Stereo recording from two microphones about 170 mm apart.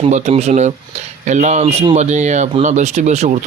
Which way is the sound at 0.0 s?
40° right (ahead or behind).